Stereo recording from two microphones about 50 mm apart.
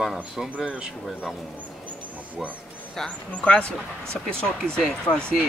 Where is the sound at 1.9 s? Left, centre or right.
Right.